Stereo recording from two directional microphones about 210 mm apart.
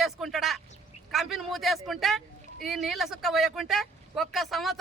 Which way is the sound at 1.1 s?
Centre (ahead or behind).